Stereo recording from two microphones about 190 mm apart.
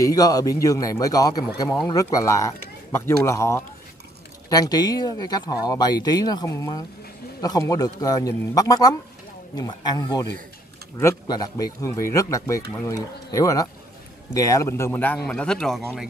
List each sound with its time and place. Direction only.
0.0 s speech: 20° left (ahead or behind); by 16.1 s centre (ahead or behind)